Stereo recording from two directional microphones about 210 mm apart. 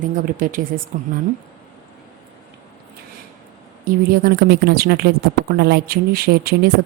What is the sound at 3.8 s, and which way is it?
Speech, 45° right (ahead or behind).